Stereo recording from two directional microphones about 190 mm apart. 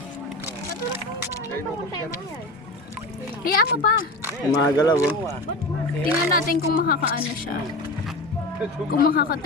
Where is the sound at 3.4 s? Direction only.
50° left (ahead or behind).